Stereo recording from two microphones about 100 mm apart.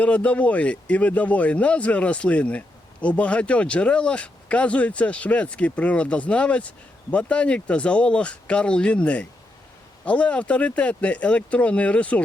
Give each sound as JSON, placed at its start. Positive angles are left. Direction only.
{"t": 0.0, "sound": "a man's voice", "side_deg": 15}